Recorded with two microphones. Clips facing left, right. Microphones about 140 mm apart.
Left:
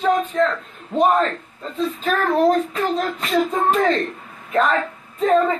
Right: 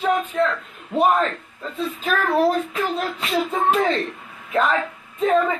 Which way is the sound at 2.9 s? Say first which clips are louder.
Left 3 dB; 40° left (ahead or behind).